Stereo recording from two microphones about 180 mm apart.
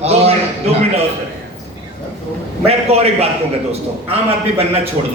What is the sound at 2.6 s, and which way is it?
Speech, 35° right (ahead or behind).